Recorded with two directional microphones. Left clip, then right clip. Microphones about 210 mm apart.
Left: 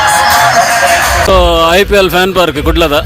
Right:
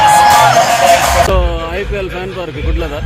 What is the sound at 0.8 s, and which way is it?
Sheep, 50° right (ahead or behind).